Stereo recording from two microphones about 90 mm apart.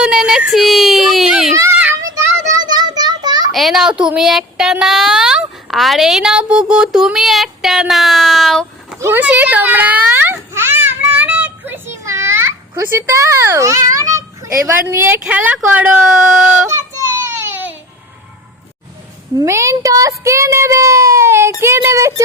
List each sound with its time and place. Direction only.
0.0 s speech: 5° right (ahead or behind)
2.5 s a sound: 50° right (ahead or behind)
3.5 s child singing: centre (ahead or behind)
9.0 s a child's voice: 30° right (ahead or behind)
9.2 s a child's voice: 15° right (ahead or behind)
11.0 s children playing: 15° right (ahead or behind); by 12.5 s 30° right (ahead or behind)
12.9 s a child's voice: 30° right (ahead or behind); by 16.6 s 15° right (ahead or behind)
16.6 s child singing: 25° right (ahead or behind)
19.5 s a child's voice: 35° right (ahead or behind)